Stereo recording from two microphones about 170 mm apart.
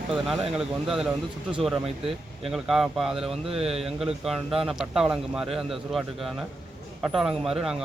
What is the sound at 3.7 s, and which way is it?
A man's voice, centre (ahead or behind).